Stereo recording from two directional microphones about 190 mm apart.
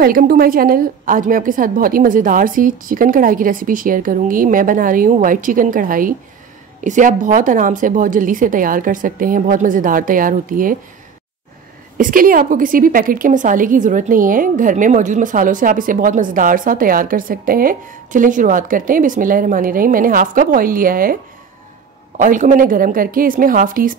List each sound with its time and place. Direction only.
0.0 s a woman's voice: 50° right (ahead or behind)
12.0 s a woman's voice: 45° right (ahead or behind)